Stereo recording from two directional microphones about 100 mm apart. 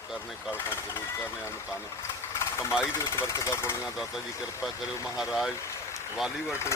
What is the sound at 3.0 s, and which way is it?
Speech, 30° left (ahead or behind).